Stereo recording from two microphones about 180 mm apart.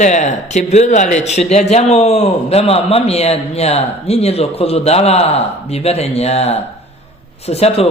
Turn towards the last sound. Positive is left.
turn(degrees=35)  # may be behind; listen again after turning